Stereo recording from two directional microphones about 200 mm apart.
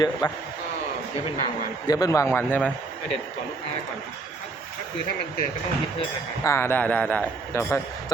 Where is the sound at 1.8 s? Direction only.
20° left (ahead or behind).